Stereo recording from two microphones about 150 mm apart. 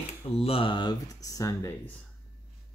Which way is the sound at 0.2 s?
35° left (ahead or behind).